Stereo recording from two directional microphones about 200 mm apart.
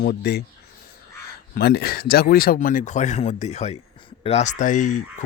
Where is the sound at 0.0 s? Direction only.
50° left (ahead or behind).